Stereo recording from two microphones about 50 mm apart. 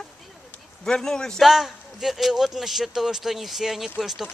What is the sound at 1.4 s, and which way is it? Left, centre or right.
Speech, centre.